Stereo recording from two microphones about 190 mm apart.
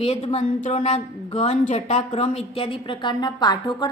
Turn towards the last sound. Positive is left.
turn(degrees=20)  # may be behind; listen again after turning